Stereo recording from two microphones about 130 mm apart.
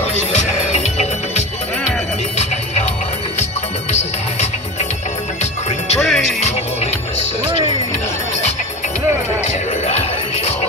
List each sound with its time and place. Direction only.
0.0 s music: 60° left (ahead or behind)
5.9 s music: centre (ahead or behind)
6.4 s music: 55° left (ahead or behind)